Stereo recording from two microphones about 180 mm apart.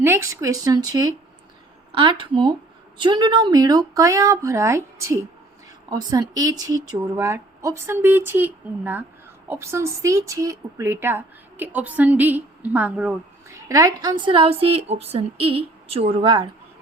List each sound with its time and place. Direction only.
0.0 s speech: 15° right (ahead or behind)
13.7 s a woman's voice: 20° right (ahead or behind)